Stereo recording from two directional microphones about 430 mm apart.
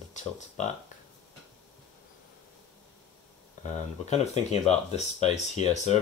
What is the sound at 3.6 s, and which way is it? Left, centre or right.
Speech, centre.